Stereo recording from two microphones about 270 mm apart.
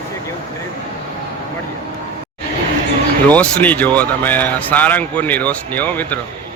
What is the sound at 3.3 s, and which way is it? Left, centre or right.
Speech, centre.